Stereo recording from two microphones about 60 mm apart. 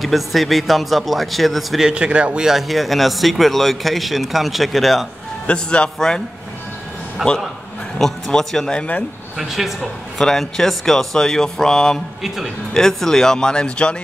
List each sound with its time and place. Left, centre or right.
0.0 s speech: centre
1.9 s speech: centre
2.5 s speech: centre
5.5 s speech: centre
7.2 s speech: centre
9.4 s speech: centre
10.2 s speech: centre